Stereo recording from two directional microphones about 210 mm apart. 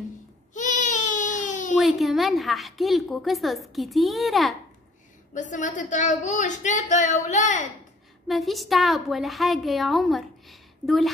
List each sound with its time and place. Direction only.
0.6 s baby cry: 35° left (ahead or behind)
1.8 s a woman's voice: centre (ahead or behind)
5.3 s speech: 35° left (ahead or behind)
8.3 s a woman's voice: centre (ahead or behind)